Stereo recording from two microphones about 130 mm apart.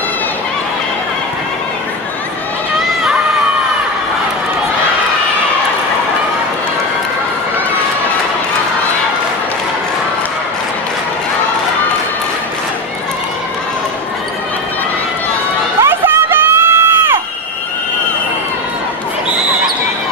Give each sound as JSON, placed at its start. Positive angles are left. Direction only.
{"t": 15.8, "sound": "crowd", "side_deg": -15}